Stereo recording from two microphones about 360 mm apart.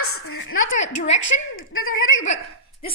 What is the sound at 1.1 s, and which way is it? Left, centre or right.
A woman's voice, left.